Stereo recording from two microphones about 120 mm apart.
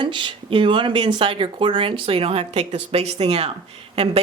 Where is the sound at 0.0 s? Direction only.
40° right (ahead or behind).